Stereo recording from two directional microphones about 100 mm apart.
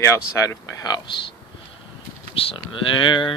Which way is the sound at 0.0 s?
30° left (ahead or behind).